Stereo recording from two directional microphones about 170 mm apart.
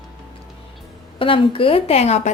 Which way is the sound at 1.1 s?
30° left (ahead or behind).